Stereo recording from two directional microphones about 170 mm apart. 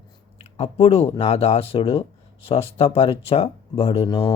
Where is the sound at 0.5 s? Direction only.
35° left (ahead or behind).